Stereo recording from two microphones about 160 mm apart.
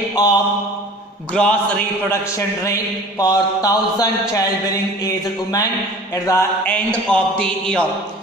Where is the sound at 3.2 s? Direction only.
25° left (ahead or behind).